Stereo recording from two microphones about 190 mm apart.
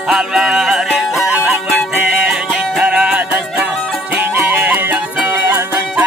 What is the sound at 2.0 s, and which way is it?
Music, 5° right (ahead or behind).